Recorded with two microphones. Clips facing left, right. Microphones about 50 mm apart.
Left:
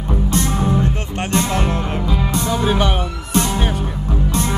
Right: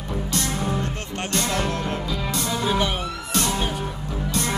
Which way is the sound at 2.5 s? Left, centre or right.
Left.